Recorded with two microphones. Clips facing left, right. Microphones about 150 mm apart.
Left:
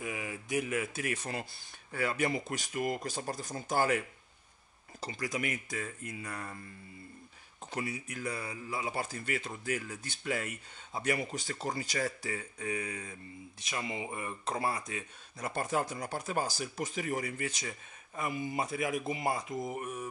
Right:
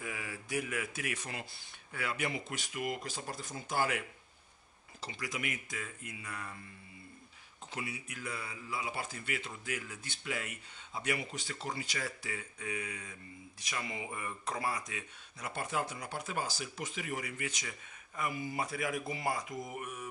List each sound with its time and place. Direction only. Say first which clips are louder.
0.0 s speech: left 4 dB; 20° left (ahead or behind); by 4.0 s 40° left (ahead or behind)
5.0 s speech: left 4 dB; 40° left (ahead or behind)
7.7 s speech: left 5 dB; 40° left (ahead or behind)
13.6 s speech: left 3 dB; 25° left (ahead or behind)